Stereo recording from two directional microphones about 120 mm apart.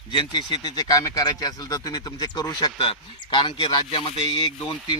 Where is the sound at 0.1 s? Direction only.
35° left (ahead or behind).